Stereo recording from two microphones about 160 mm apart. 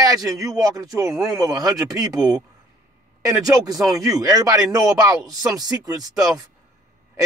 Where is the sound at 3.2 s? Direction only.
20° right (ahead or behind).